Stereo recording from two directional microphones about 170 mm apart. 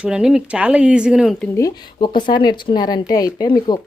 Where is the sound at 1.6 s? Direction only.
20° left (ahead or behind).